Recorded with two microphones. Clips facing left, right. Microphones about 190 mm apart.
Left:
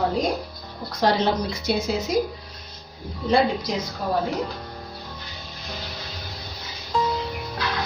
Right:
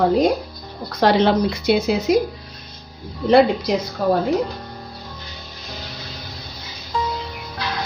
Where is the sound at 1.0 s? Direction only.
65° right (ahead or behind).